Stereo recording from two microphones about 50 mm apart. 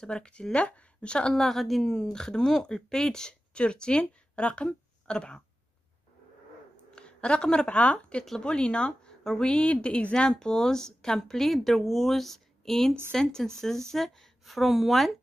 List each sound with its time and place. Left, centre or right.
0.0 s speech: centre
1.3 s speech: centre
7.0 s a woman's voice: centre